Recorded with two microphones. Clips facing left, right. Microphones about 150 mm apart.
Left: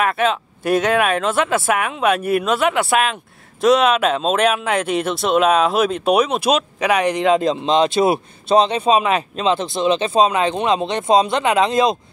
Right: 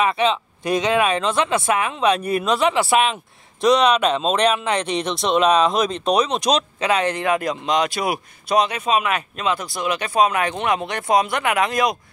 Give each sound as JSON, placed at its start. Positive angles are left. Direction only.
{"t": 0.0, "sound": "speech", "side_deg": 5}